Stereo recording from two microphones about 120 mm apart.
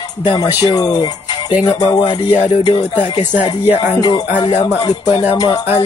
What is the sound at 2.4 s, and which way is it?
Speech, 55° left (ahead or behind).